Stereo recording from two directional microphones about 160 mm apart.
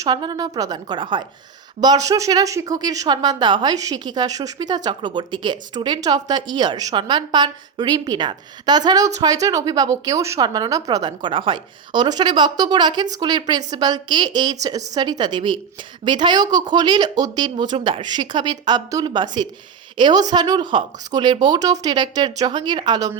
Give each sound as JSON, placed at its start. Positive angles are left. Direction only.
{"t": 0.0, "sound": "speech", "side_deg": -25}